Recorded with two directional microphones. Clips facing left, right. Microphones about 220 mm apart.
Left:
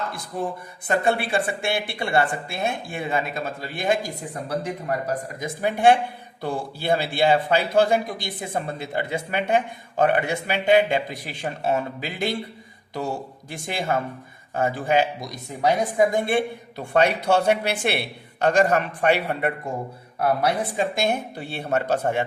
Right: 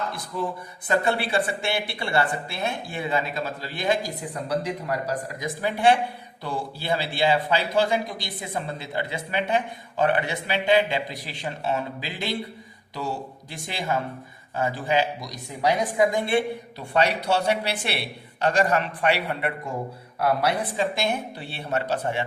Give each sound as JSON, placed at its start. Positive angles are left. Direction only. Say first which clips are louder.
{"t": 0.3, "sound": "speech", "louder": "left 1 dB", "side_deg": 50}
{"t": 13.5, "sound": "speech", "louder": "left 3 dB", "side_deg": 50}
{"t": 20.7, "sound": "speech", "louder": "left 2 dB", "side_deg": 50}